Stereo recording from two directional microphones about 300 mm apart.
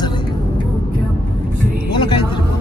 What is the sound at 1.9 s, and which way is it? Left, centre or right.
Speech, centre.